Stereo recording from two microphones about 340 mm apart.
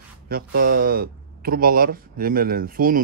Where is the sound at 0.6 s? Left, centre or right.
Right.